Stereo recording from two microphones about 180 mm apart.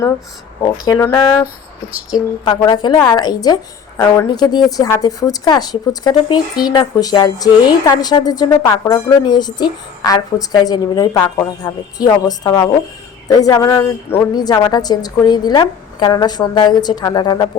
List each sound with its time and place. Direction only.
0.6 s a woman's voice: 15° left (ahead or behind)